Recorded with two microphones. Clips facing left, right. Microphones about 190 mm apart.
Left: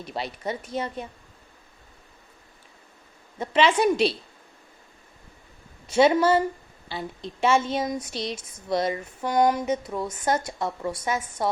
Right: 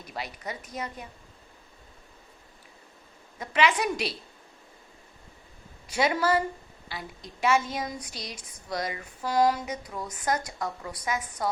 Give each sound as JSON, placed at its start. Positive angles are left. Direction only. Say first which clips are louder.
{"t": 0.0, "sound": "a woman's voice", "louder": "left 6 dB", "side_deg": 30}
{"t": 3.3, "sound": "a woman's voice", "louder": "left 4 dB", "side_deg": 30}
{"t": 5.9, "sound": "a woman's voice", "louder": "left 6 dB", "side_deg": 25}